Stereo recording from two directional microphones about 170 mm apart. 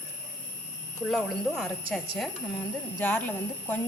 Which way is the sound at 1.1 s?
Centre (ahead or behind).